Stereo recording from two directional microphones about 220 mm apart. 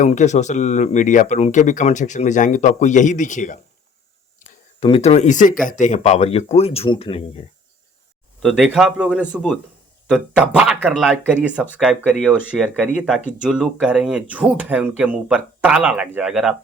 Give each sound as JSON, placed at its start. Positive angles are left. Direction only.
{"t": 0.0, "sound": "speech", "side_deg": 35}
{"t": 4.4, "sound": "a sound", "side_deg": 35}
{"t": 4.8, "sound": "speech", "side_deg": 25}
{"t": 8.4, "sound": "speech", "side_deg": 0}